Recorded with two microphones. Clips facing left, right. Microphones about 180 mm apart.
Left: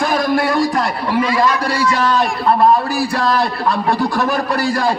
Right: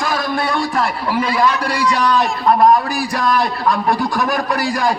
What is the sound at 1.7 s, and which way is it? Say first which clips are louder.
Speech: left 1 dB; 15° right (ahead or behind).